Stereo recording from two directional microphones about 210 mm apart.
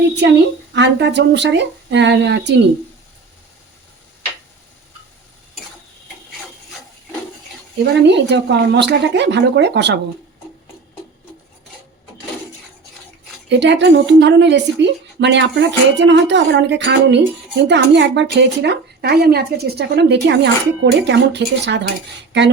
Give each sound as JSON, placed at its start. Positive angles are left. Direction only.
{"t": 0.2, "sound": "a woman's voice", "side_deg": -55}
{"t": 8.0, "sound": "a woman's voice", "side_deg": -55}
{"t": 13.5, "sound": "a woman's voice", "side_deg": -55}